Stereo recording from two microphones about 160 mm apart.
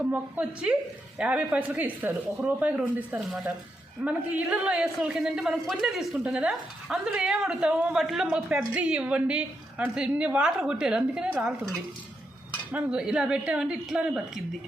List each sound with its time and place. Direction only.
0.0 s a man's voice: 10° right (ahead or behind)